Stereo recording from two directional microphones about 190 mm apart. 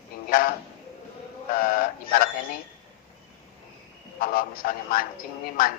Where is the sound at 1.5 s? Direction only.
50° left (ahead or behind).